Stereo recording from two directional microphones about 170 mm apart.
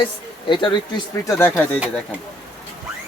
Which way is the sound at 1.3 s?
15° left (ahead or behind).